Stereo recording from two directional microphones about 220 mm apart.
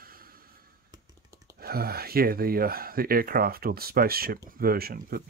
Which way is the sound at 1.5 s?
45° right (ahead or behind).